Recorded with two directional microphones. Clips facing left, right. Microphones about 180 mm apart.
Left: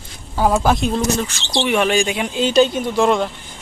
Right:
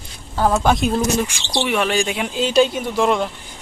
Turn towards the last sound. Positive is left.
turn(degrees=-5)  # may be behind; listen again after turning